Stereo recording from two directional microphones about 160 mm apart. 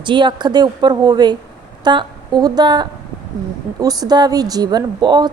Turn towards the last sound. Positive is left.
turn(degrees=-25)  # may be behind; listen again after turning